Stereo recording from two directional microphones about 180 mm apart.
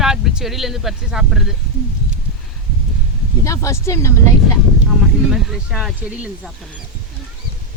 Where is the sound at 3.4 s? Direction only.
15° left (ahead or behind).